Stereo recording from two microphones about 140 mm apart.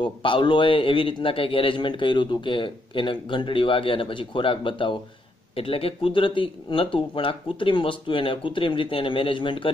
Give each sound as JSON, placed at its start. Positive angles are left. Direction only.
{"t": 0.0, "sound": "a man's voice", "side_deg": 35}